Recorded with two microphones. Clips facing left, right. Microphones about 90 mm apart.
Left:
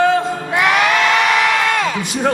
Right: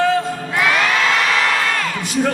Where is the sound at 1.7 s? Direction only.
20° left (ahead or behind).